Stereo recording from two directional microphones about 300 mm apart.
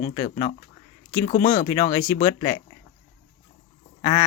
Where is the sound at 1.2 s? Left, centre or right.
Left.